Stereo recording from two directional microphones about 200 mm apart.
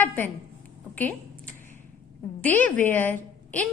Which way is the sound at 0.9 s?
10° left (ahead or behind).